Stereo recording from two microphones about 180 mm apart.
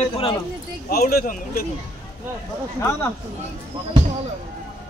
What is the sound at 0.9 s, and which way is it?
Speech, 55° left (ahead or behind).